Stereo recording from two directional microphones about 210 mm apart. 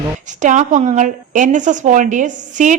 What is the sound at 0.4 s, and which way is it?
A woman's voice, 35° right (ahead or behind).